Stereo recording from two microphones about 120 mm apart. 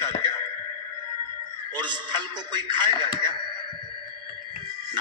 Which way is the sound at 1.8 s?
40° right (ahead or behind).